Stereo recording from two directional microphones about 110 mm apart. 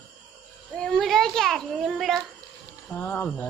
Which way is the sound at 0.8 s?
5° left (ahead or behind).